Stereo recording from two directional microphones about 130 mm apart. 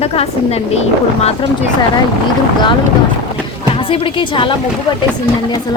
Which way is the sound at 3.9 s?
40° left (ahead or behind).